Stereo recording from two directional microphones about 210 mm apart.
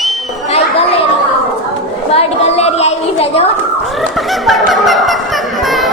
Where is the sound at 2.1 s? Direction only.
30° left (ahead or behind).